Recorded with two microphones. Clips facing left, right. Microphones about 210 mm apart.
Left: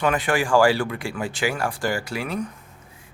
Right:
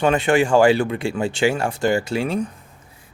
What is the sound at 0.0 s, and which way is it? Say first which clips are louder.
Speech: right 5 dB; 25° right (ahead or behind).